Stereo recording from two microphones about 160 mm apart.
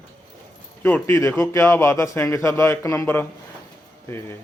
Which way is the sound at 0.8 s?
15° left (ahead or behind).